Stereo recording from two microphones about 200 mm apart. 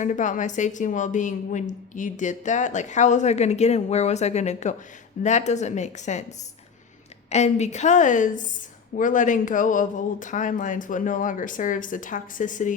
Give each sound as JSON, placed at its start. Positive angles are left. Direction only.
{"t": 0.0, "sound": "a woman's voice", "side_deg": 40}
{"t": 7.3, "sound": "a woman's voice", "side_deg": 35}